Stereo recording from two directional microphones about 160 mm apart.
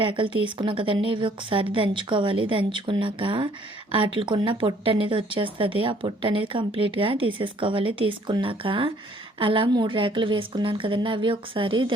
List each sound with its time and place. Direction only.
0.0 s speech: 30° right (ahead or behind)